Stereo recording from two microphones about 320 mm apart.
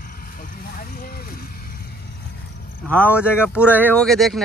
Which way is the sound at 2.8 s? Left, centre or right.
Centre.